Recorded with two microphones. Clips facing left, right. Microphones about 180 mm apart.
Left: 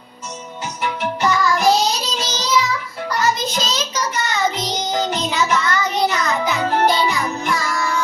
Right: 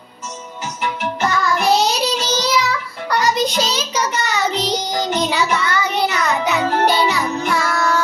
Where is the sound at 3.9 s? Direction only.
70° right (ahead or behind).